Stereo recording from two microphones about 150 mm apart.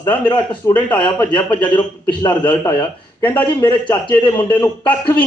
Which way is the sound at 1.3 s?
30° left (ahead or behind).